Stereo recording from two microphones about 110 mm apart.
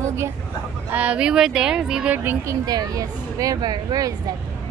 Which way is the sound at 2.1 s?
20° right (ahead or behind).